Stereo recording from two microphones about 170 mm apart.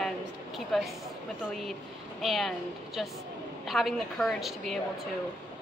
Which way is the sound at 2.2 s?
Centre (ahead or behind).